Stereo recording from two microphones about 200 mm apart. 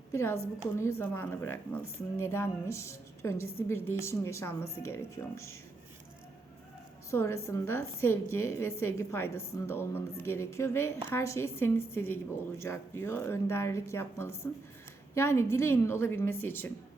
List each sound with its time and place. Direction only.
0.1 s a woman's voice: 15° left (ahead or behind)
7.1 s a woman's voice: 10° left (ahead or behind)